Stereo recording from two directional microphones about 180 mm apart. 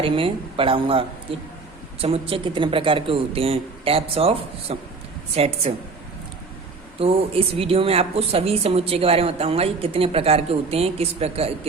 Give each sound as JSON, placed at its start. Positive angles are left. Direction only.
{"t": 0.0, "sound": "speech", "side_deg": -30}
{"t": 7.0, "sound": "speech", "side_deg": -30}